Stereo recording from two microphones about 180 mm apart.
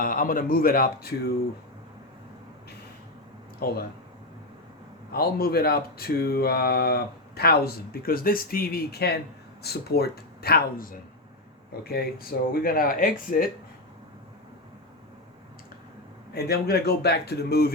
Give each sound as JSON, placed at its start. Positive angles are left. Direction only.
{"t": 0.0, "sound": "a man's voice", "side_deg": 50}
{"t": 3.6, "sound": "speech", "side_deg": 60}
{"t": 5.1, "sound": "speech", "side_deg": 60}
{"t": 16.3, "sound": "speech", "side_deg": 60}